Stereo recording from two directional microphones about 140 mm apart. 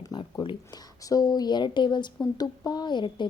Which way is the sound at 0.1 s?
30° left (ahead or behind).